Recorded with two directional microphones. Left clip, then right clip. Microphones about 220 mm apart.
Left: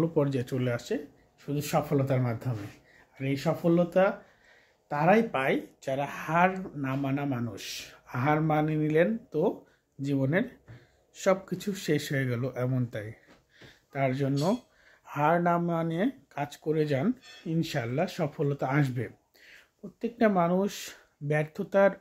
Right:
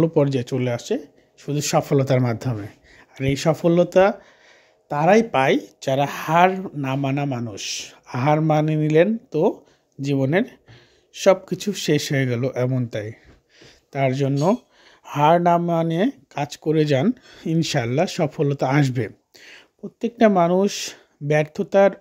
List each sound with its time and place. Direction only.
0.0 s speech: 35° right (ahead or behind)